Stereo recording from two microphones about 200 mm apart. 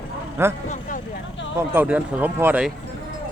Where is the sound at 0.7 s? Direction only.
40° left (ahead or behind).